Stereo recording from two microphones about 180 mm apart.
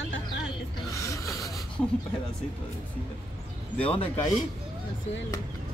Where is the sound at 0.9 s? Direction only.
15° left (ahead or behind).